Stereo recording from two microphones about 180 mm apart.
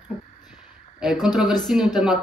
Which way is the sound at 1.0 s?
Centre (ahead or behind).